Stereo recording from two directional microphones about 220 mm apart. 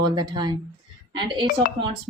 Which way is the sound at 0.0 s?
20° right (ahead or behind).